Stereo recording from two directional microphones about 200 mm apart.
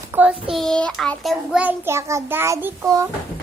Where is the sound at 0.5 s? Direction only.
5° left (ahead or behind).